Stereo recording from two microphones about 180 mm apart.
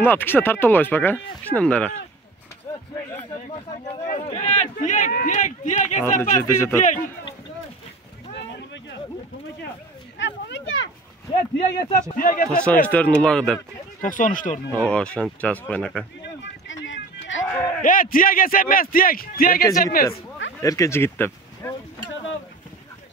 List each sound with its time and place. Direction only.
0.0 s speech: 10° left (ahead or behind)
4.3 s speech: 40° left (ahead or behind)
6.4 s speech: 15° left (ahead or behind)
6.8 s speech: 45° left (ahead or behind)
10.1 s a sound: 90° left
11.8 s speech: 50° left (ahead or behind)
12.4 s speech: 5° left (ahead or behind)
14.0 s speech: 50° left (ahead or behind)
14.9 s speech: 5° left (ahead or behind)
16.2 s a sound: 90° left
17.5 s a sound: 10° left (ahead or behind)
17.8 s speech: 50° left (ahead or behind)
20.6 s speech: 20° left (ahead or behind)